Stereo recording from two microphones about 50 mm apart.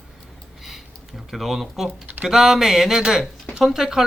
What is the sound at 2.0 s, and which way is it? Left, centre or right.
Speech, right.